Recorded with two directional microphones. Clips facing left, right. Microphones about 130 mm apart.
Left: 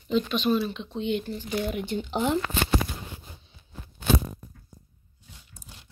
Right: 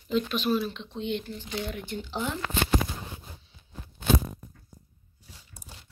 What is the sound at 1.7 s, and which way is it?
Speech, 20° left (ahead or behind).